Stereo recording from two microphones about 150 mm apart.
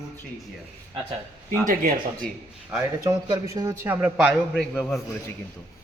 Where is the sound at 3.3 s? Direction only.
25° right (ahead or behind); by 5.0 s centre (ahead or behind).